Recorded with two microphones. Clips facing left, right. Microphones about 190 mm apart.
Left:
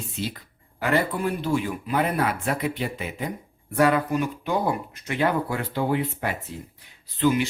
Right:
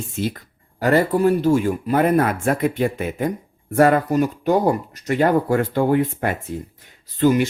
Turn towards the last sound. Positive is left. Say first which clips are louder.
# right 5 dB
turn(degrees=-45)  # may be behind; listen again after turning